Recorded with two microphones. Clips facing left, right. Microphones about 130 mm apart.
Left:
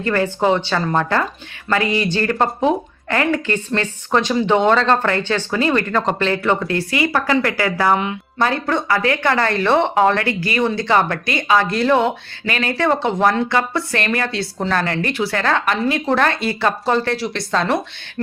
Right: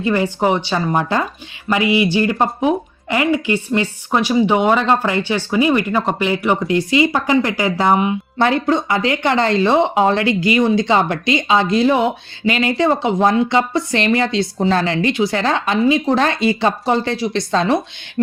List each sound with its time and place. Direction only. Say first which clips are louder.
0.0 s speech: right 1 dB; 15° right (ahead or behind)